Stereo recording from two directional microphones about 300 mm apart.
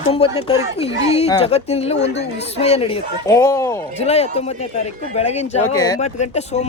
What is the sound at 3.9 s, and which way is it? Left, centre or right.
Speech, left.